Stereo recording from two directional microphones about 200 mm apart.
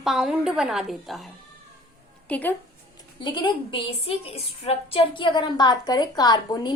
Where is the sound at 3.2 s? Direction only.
25° left (ahead or behind).